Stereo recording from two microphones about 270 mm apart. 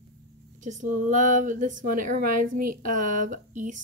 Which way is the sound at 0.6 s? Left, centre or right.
Right.